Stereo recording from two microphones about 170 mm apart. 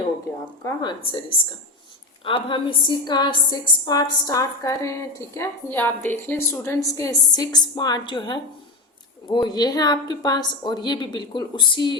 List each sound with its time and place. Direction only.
0.6 s a woman's voice: 25° left (ahead or behind)
2.2 s a woman's voice: 30° left (ahead or behind)